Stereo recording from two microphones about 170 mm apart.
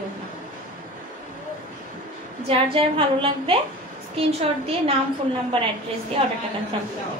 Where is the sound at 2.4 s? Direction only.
35° right (ahead or behind).